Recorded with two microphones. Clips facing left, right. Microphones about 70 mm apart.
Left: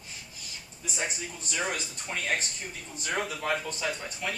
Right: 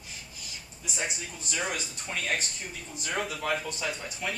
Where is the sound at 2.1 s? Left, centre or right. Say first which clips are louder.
Left 1 dB; centre.